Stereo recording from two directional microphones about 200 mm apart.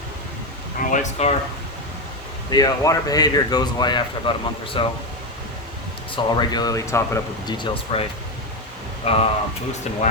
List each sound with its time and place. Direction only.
0.9 s speech: 35° left (ahead or behind)
2.5 s speech: 20° left (ahead or behind)
6.1 s speech: 20° left (ahead or behind)
9.0 s speech: 30° left (ahead or behind)